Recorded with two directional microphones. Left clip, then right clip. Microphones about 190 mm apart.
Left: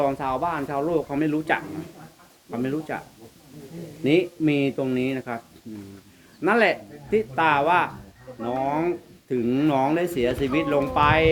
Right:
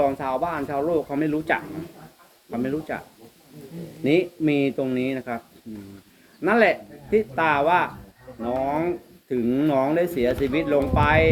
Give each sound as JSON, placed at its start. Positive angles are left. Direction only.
{"t": 0.0, "sound": "speech", "side_deg": 20}
{"t": 4.0, "sound": "speech", "side_deg": 20}
{"t": 6.4, "sound": "speech", "side_deg": 20}